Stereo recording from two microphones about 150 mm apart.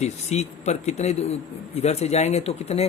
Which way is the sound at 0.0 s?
50° left (ahead or behind).